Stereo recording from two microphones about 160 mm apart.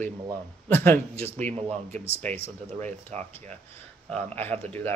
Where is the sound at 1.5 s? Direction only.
40° right (ahead or behind).